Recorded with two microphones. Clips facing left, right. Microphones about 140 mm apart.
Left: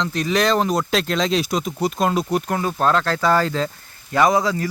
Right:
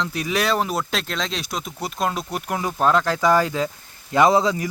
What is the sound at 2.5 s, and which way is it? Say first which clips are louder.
Speech: right 3 dB; 10° right (ahead or behind).